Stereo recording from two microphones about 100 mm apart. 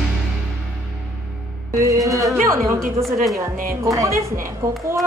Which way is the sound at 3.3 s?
35° right (ahead or behind).